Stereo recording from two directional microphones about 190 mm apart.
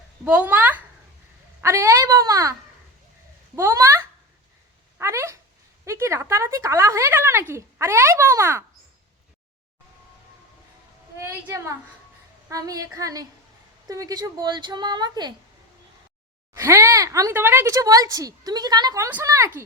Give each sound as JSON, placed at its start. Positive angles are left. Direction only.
{"t": 0.3, "sound": "speech", "side_deg": -10}
{"t": 11.2, "sound": "a woman's voice", "side_deg": -15}
{"t": 16.6, "sound": "speech", "side_deg": -15}